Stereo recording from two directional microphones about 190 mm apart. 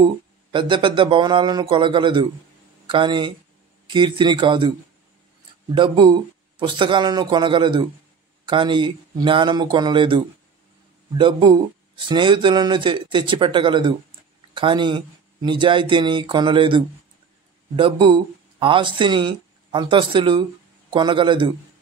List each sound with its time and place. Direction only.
0.0 s speech: 25° right (ahead or behind)
5.8 s speech: 25° right (ahead or behind)